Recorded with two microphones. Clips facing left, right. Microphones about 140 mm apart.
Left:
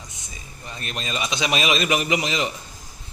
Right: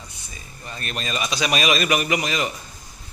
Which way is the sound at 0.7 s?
20° left (ahead or behind).